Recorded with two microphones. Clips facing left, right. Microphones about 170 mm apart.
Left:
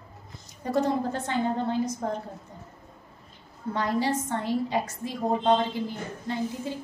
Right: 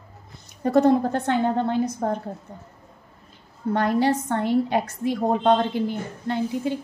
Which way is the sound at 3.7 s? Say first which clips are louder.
Right 5 dB; 65° right (ahead or behind).